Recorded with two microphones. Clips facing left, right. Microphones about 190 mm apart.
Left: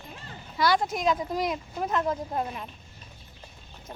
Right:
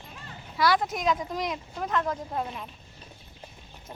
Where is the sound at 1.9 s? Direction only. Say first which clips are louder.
Left 1 dB; 25° left (ahead or behind).